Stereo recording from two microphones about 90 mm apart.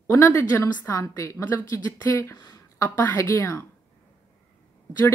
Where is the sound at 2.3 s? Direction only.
55° left (ahead or behind).